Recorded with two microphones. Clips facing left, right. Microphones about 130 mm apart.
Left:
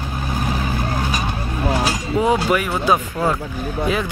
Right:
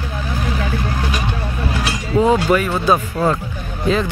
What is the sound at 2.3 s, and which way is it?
Speech, 10° left (ahead or behind).